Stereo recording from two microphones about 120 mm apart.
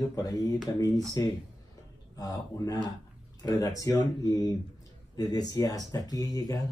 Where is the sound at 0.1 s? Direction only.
30° left (ahead or behind).